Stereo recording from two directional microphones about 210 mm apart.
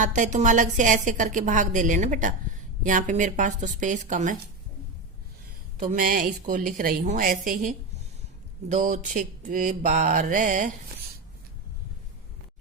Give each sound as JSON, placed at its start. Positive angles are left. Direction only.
{"t": 0.0, "sound": "a woman's voice", "side_deg": -35}
{"t": 5.8, "sound": "a woman's voice", "side_deg": -40}